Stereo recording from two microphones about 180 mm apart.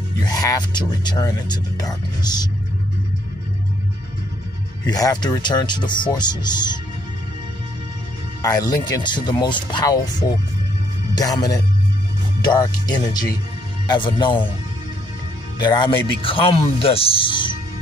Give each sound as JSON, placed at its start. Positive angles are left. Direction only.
{"t": 0.2, "sound": "speech", "side_deg": 20}
{"t": 4.8, "sound": "speech", "side_deg": 20}
{"t": 8.4, "sound": "speech", "side_deg": 20}
{"t": 15.6, "sound": "speech", "side_deg": 25}